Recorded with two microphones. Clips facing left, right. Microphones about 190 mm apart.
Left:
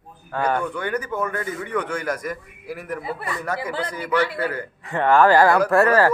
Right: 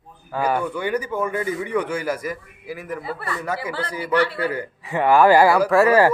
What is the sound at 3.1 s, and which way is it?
Speech, 15° left (ahead or behind).